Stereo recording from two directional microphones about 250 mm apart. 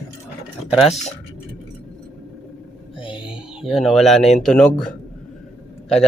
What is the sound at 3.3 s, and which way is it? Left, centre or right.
Speech, centre.